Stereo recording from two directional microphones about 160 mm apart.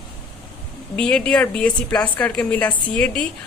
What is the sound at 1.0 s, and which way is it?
A woman's voice, 5° left (ahead or behind).